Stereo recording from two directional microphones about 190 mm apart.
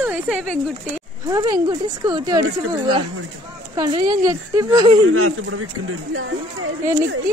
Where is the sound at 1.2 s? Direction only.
20° right (ahead or behind).